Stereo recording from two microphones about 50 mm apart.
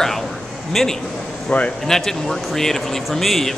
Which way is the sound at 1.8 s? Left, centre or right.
Centre.